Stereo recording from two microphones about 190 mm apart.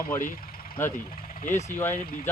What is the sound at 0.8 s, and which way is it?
Speech, 10° left (ahead or behind).